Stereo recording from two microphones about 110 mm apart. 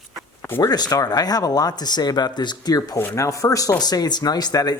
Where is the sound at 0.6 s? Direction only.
35° left (ahead or behind).